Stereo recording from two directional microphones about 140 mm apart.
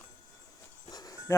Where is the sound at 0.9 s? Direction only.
25° left (ahead or behind).